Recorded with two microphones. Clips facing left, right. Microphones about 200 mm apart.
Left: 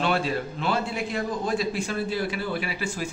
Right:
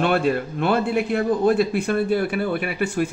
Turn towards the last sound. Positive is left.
turn(degrees=-60)  # may be behind; listen again after turning